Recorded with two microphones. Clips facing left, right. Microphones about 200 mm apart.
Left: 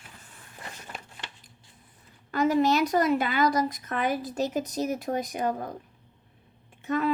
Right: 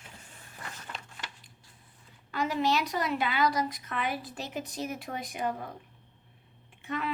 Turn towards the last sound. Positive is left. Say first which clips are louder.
# left 8 dB
turn(degrees=45)  # may be behind; listen again after turning